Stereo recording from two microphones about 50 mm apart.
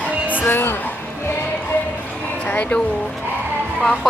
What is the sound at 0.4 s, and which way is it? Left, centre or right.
Speech, left.